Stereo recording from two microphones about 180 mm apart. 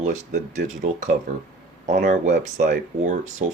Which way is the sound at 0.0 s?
45° right (ahead or behind).